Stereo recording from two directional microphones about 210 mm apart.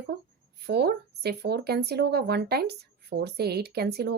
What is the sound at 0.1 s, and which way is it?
Speech, 50° right (ahead or behind).